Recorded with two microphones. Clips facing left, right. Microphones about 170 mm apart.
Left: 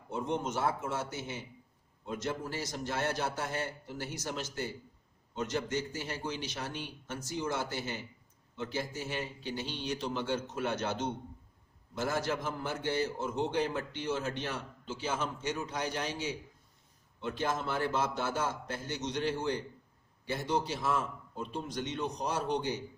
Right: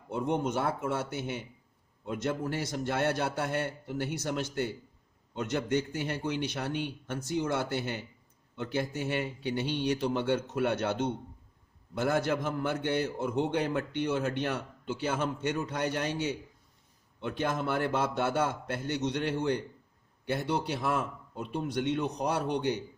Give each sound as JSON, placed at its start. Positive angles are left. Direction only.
{"t": 0.1, "sound": "a man's voice", "side_deg": -55}